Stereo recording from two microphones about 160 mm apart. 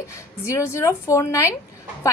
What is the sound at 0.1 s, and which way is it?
A woman's voice, 15° left (ahead or behind).